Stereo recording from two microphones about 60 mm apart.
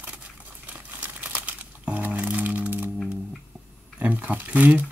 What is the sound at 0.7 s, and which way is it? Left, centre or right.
Music, right.